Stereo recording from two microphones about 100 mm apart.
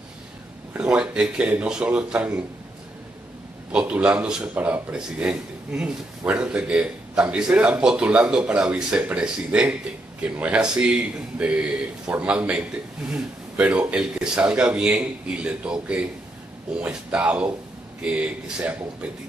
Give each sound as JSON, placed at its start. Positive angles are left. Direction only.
{"t": 0.7, "sound": "speech", "side_deg": -10}
{"t": 3.7, "sound": "speech", "side_deg": -15}